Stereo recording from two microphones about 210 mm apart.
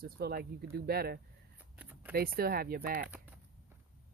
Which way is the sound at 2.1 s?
45° right (ahead or behind).